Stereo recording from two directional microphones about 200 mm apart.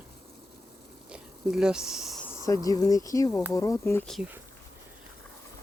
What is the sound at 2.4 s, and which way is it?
Speech, 15° left (ahead or behind).